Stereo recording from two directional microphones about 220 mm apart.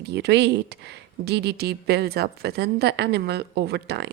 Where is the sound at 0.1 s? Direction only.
50° right (ahead or behind).